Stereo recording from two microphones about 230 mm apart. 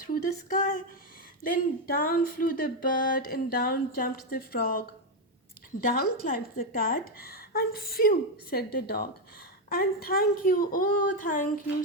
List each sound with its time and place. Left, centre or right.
0.0 s speech: left
1.9 s a woman's voice: left
5.8 s a woman's voice: left